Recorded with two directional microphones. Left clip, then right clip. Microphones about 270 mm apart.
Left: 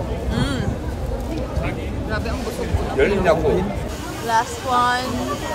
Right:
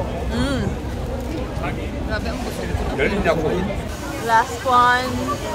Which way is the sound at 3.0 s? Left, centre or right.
Left.